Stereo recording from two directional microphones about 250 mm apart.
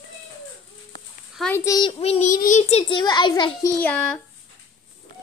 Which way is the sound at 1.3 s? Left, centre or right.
Centre.